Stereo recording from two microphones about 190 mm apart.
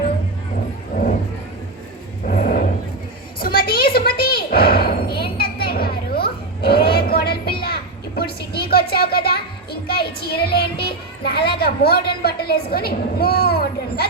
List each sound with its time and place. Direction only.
2.2 s vehicle: 50° left (ahead or behind)
3.4 s a sound: 50° left (ahead or behind)
9.8 s speech: 55° left (ahead or behind)